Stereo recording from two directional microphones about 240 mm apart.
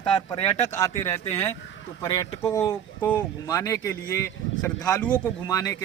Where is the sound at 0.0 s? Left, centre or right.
Left.